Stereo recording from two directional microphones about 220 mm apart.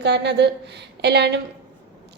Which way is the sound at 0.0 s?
50° right (ahead or behind).